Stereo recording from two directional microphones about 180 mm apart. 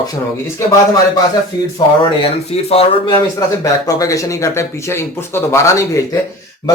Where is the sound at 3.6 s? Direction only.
20° left (ahead or behind).